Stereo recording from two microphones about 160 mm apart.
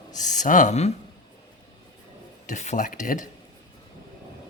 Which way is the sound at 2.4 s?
50° left (ahead or behind).